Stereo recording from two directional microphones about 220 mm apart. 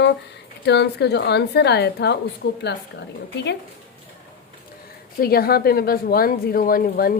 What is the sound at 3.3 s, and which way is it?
Speech, 50° left (ahead or behind).